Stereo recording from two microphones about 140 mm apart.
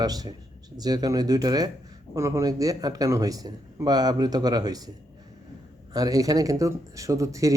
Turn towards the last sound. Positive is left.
turn(degrees=-25)  # may be behind; listen again after turning